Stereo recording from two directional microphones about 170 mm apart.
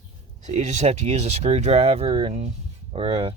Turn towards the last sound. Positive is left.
turn(degrees=-35)  # may be behind; listen again after turning